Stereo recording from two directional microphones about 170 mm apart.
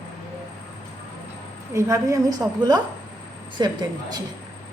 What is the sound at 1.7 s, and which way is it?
Speech, 20° right (ahead or behind).